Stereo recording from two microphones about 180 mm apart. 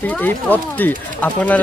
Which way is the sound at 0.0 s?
10° left (ahead or behind).